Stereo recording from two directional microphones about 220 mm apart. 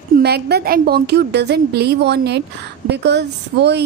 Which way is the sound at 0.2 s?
45° right (ahead or behind).